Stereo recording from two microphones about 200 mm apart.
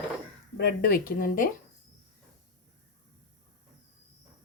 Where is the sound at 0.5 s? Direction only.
50° left (ahead or behind).